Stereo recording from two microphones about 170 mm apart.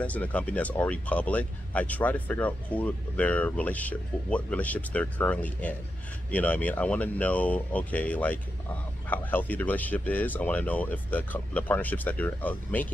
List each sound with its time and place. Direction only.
0.0 s speech: 10° left (ahead or behind)